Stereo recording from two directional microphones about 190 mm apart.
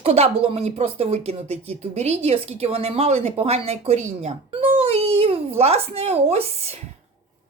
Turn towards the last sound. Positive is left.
turn(degrees=-35)  # may be behind; listen again after turning